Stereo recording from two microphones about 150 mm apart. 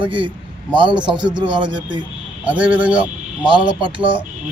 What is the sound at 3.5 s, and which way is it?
Speech, 30° right (ahead or behind).